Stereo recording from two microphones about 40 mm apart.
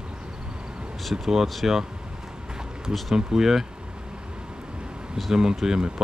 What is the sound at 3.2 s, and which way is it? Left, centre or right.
Speech, centre.